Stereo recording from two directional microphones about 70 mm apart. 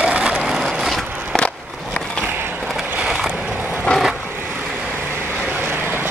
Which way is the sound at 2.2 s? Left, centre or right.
Right.